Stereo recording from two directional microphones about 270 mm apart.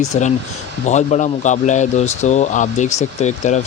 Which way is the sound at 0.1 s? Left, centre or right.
Left.